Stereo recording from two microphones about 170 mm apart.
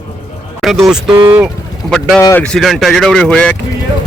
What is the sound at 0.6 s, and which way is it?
Speech, centre (ahead or behind).